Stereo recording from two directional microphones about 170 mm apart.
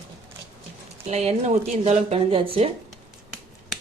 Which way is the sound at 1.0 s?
40° right (ahead or behind).